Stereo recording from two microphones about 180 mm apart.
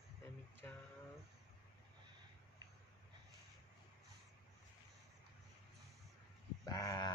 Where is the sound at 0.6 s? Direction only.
10° left (ahead or behind).